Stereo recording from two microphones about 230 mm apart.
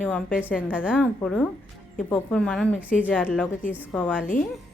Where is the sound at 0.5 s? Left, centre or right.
Centre.